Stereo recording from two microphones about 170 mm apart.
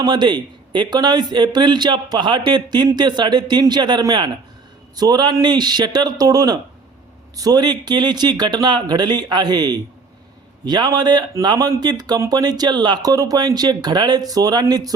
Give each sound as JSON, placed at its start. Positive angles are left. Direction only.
{"t": 0.0, "sound": "speech", "side_deg": -25}